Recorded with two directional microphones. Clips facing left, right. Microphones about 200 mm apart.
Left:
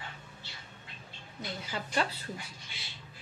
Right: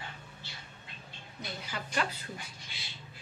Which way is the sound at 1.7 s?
30° left (ahead or behind).